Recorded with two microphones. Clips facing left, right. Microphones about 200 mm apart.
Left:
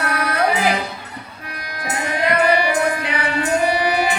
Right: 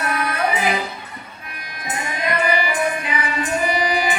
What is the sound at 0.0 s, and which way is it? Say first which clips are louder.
Music: left 2 dB; 70° left (ahead or behind).